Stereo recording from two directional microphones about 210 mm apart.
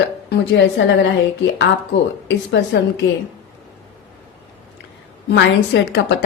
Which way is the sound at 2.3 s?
55° left (ahead or behind).